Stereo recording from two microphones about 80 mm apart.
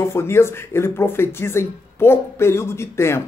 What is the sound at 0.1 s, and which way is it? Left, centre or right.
Speech, left.